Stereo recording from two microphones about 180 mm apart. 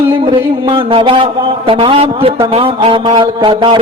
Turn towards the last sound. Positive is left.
turn(degrees=-25)  # may be behind; listen again after turning